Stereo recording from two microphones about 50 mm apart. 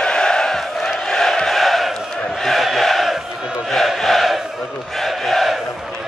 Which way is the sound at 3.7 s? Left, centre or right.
Centre.